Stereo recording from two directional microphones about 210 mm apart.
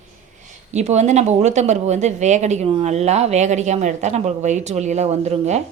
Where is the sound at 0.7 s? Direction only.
30° right (ahead or behind).